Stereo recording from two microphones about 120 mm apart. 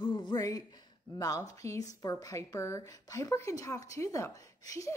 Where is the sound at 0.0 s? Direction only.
40° left (ahead or behind).